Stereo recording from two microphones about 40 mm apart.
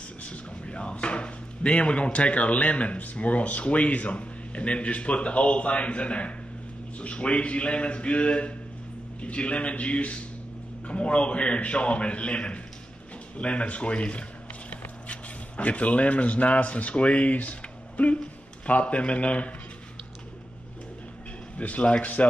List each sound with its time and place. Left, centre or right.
0.2 s a sound: left
3.0 s speech: left
21.5 s speech: left